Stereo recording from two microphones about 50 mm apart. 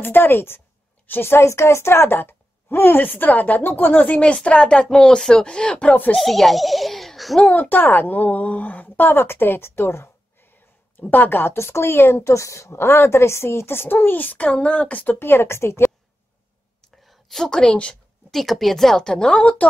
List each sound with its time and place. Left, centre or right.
0.0 s a woman's voice: left
1.4 s a woman's voice: left
4.5 s speech: left
4.8 s speech: centre
6.1 s a child's voice: centre
7.5 s a woman's voice: left
11.0 s a woman's voice: left
11.5 s a woman's voice: left
13.9 s a woman's voice: left
14.4 s speech: left
15.1 s a woman's voice: left
17.0 s a woman's voice: centre
18.3 s speech: centre; by 19.7 s left